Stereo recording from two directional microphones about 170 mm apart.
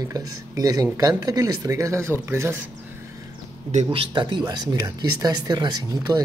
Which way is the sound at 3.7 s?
30° right (ahead or behind).